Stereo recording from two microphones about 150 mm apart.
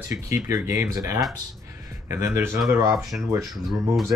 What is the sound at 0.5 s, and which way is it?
Speech, 20° right (ahead or behind).